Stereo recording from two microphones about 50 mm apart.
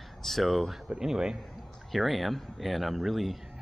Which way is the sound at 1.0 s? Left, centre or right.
Centre.